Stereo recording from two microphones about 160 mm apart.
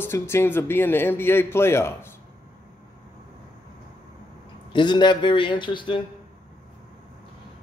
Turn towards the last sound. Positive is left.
turn(degrees=30)  # may be behind; listen again after turning